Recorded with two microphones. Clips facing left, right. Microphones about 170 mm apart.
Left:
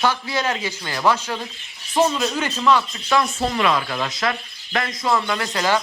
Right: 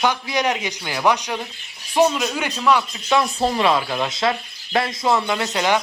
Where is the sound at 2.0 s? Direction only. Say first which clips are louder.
Right 1 dB; centre (ahead or behind).